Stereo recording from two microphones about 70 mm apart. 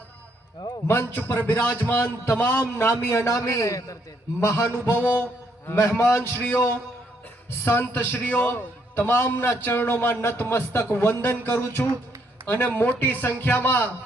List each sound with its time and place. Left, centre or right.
0.9 s a man's voice: left
2.6 s a man's voice: left
4.9 s mantra: right
5.7 s a man's voice: left
6.1 s a man's voice: left